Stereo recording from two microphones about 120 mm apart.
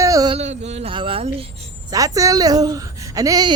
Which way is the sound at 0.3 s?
65° right (ahead or behind).